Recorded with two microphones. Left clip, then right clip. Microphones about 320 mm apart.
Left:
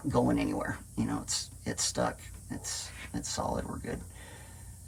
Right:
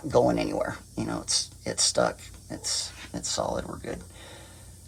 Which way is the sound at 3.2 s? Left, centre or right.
Centre.